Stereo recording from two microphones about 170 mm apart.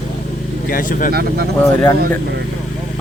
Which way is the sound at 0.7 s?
55° left (ahead or behind).